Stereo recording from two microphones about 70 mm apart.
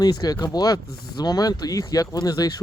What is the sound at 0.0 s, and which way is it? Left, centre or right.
Speech, left.